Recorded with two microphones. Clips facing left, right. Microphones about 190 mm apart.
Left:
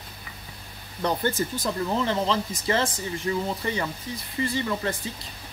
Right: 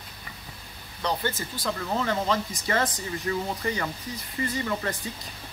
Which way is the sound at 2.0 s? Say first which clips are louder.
Left 1 dB; 30° left (ahead or behind).